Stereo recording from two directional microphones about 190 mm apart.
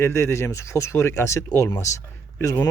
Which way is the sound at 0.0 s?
15° left (ahead or behind).